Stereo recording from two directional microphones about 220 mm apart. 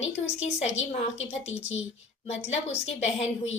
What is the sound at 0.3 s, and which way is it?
A woman's voice, 30° left (ahead or behind).